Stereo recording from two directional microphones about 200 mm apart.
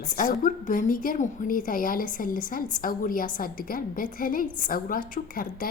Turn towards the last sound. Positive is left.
turn(degrees=45)  # may be behind; listen again after turning